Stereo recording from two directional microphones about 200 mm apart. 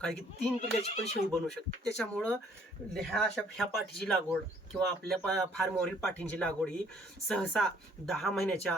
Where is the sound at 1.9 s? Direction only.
5° left (ahead or behind).